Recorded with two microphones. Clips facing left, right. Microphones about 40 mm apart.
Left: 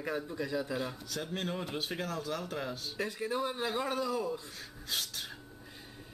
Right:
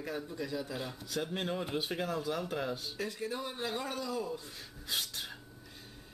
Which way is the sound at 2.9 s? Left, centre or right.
Centre.